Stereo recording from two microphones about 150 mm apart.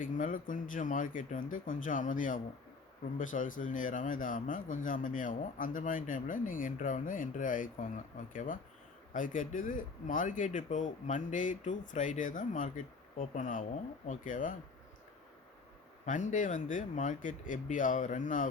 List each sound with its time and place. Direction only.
0.0 s speech: 60° left (ahead or behind)
16.0 s speech: 55° left (ahead or behind)